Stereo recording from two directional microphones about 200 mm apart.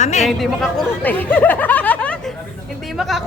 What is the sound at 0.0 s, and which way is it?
Speech, 35° left (ahead or behind).